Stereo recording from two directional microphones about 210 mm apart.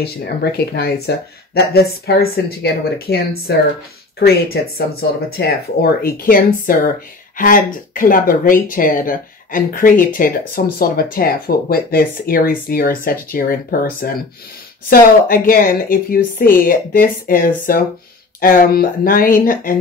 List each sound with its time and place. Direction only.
0.0 s speech: 50° left (ahead or behind)